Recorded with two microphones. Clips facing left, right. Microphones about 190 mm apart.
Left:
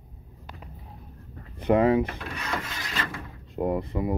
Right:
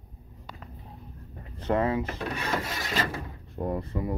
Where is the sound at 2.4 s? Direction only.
30° right (ahead or behind).